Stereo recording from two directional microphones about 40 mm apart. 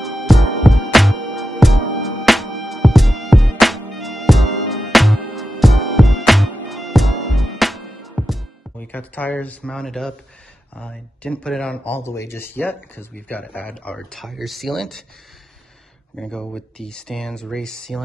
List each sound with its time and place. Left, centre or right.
0.0 s music: centre
8.7 s speech: left
9.7 s speech: centre
10.7 s speech: left
12.0 s speech: left
12.5 s speech: left
14.1 s speech: centre
16.2 s speech: left